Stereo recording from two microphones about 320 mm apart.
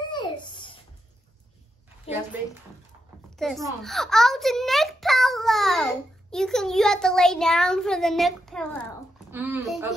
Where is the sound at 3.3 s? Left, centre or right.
Centre.